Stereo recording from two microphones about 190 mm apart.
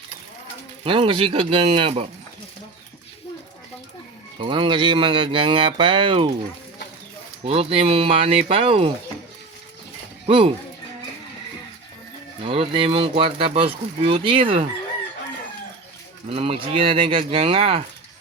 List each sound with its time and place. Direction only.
0.9 s speech: 25° right (ahead or behind)
4.4 s speech: 25° right (ahead or behind)
7.4 s speech: 30° right (ahead or behind)
10.2 s speech: 30° right (ahead or behind)
12.4 s speech: 30° right (ahead or behind)
16.3 s speech: 30° right (ahead or behind)